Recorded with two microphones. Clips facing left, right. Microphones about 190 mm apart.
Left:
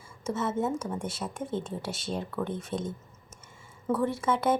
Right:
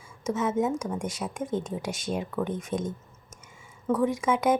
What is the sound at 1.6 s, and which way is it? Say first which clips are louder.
Speech: right 3 dB; 15° right (ahead or behind).